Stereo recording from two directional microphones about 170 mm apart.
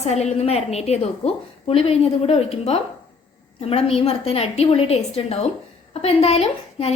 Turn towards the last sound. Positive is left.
turn(degrees=35)  # may be behind; listen again after turning